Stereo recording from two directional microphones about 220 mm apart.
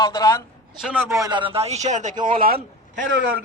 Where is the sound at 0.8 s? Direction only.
5° right (ahead or behind).